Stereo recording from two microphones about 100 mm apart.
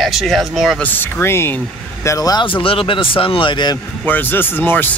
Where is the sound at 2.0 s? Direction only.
35° left (ahead or behind).